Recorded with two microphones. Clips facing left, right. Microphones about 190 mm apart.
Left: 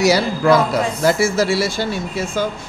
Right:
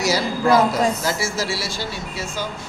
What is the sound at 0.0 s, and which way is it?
Speech, 65° left (ahead or behind).